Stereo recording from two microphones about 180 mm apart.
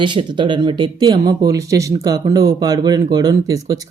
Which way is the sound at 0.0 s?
25° right (ahead or behind).